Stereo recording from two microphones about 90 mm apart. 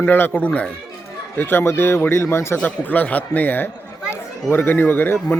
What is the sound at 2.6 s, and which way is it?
Speech, 20° left (ahead or behind).